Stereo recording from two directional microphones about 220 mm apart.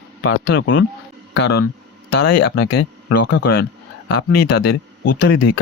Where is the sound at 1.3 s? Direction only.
50° left (ahead or behind).